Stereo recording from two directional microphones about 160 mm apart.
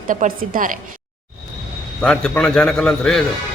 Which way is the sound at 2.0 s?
5° left (ahead or behind).